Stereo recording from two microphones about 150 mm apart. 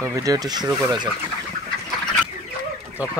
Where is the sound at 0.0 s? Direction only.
25° right (ahead or behind).